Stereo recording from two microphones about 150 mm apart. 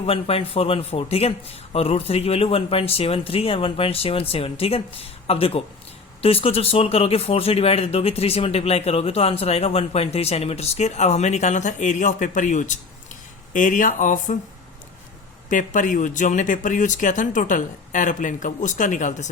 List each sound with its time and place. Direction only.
0.0 s a man's voice: 40° left (ahead or behind); by 14.3 s 60° left (ahead or behind)
15.4 s speech: 60° left (ahead or behind)